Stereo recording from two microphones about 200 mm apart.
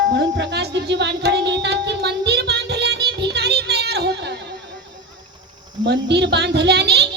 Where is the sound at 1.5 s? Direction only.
60° right (ahead or behind).